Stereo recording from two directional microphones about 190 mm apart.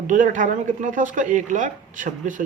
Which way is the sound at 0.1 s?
40° right (ahead or behind).